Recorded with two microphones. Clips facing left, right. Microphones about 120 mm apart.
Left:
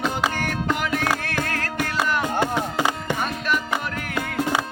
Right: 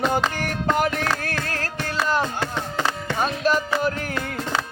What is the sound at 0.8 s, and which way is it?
Music, 40° right (ahead or behind).